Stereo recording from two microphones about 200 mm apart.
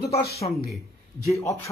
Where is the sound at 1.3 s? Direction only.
15° left (ahead or behind).